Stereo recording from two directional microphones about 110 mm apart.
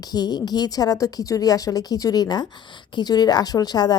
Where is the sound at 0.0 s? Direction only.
35° left (ahead or behind).